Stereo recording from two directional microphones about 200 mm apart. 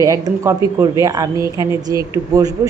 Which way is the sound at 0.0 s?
15° right (ahead or behind).